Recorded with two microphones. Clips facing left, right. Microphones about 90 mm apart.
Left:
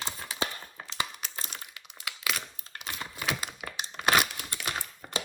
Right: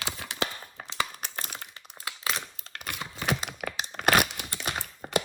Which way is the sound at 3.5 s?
55° right (ahead or behind).